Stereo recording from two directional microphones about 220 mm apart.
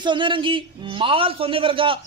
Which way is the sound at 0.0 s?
20° right (ahead or behind).